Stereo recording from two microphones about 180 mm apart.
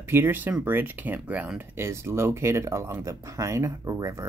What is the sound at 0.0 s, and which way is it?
Speech, 10° right (ahead or behind).